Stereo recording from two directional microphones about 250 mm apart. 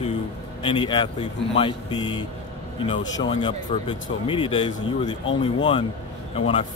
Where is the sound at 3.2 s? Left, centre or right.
Centre.